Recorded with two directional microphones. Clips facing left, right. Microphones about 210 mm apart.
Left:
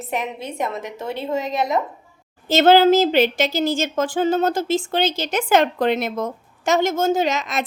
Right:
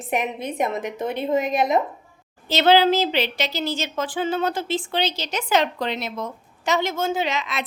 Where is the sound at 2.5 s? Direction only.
45° left (ahead or behind).